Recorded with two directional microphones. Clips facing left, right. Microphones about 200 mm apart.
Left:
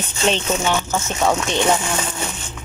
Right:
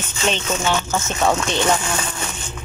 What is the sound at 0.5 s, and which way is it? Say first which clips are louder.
Speech: left 1 dB; 10° left (ahead or behind).